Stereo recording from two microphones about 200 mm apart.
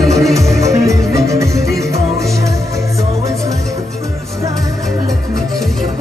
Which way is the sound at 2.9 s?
Centre (ahead or behind).